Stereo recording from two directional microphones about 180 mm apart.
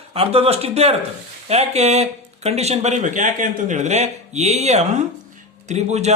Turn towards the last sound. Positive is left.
turn(degrees=-40)  # may be behind; listen again after turning